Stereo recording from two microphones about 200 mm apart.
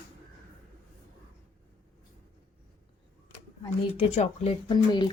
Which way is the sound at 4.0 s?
30° left (ahead or behind).